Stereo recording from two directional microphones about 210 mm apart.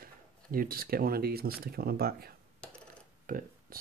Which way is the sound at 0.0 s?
45° right (ahead or behind).